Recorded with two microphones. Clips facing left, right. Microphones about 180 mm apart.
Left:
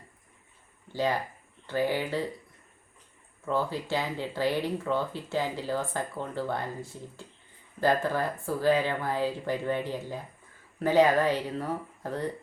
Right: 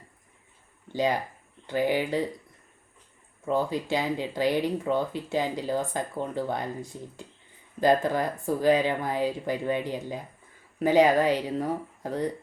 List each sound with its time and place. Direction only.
0.9 s speech: 15° right (ahead or behind)
3.4 s speech: 15° right (ahead or behind)